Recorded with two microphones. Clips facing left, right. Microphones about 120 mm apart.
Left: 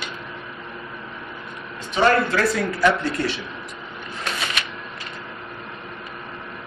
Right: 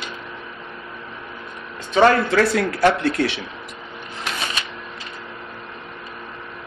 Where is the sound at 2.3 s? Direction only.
70° right (ahead or behind).